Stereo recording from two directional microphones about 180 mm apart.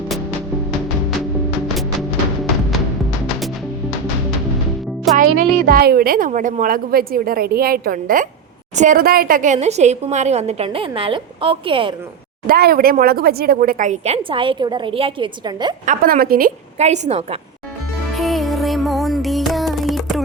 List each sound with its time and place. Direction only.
1.6 s music: centre (ahead or behind)
5.1 s music: centre (ahead or behind)
5.6 s a woman's voice: 55° right (ahead or behind); by 11.9 s 30° right (ahead or behind)
12.5 s speech: 55° right (ahead or behind); by 15.7 s 25° right (ahead or behind)
15.9 s speech: 55° right (ahead or behind)
16.7 s a woman's voice: 40° right (ahead or behind)
18.1 s music: centre (ahead or behind)